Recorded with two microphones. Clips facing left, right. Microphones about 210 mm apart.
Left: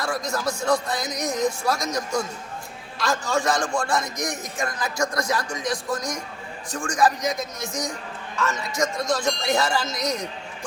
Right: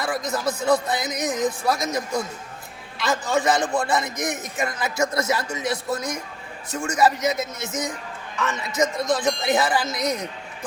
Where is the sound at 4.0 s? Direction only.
5° right (ahead or behind).